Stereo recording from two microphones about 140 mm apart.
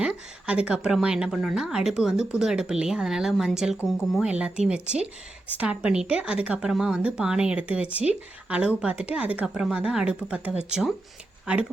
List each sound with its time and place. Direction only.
0.0 s a woman's voice: 5° right (ahead or behind)